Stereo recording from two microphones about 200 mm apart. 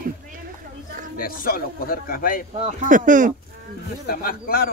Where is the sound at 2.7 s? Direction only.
40° right (ahead or behind).